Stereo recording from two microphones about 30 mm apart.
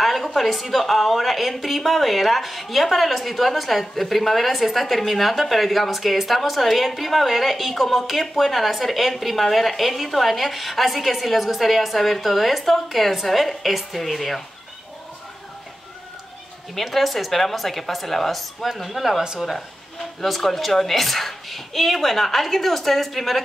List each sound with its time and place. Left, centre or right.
0.0 s a sound: centre
0.4 s speech: centre
16.7 s speech: centre
20.2 s speech: centre